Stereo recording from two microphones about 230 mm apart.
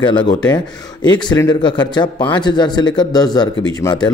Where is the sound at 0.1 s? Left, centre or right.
Centre.